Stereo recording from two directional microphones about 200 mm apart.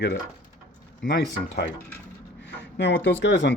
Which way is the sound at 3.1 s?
65° left (ahead or behind).